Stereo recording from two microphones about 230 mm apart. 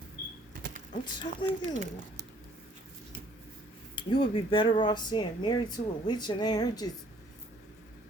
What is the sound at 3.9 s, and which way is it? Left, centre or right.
Speech, left.